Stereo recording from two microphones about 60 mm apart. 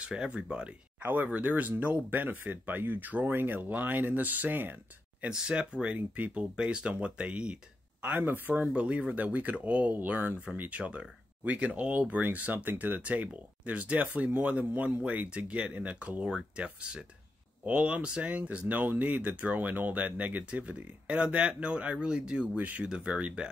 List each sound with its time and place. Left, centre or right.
0.0 s speech: centre
1.0 s speech: right
5.3 s speech: centre
6.5 s speech: centre
8.0 s speech: right; by 22.6 s centre
22.6 s speech: right
22.8 s speech: centre